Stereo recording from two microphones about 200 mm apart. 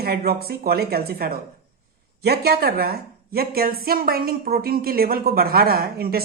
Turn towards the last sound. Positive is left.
turn(degrees=-50)  # may be behind; listen again after turning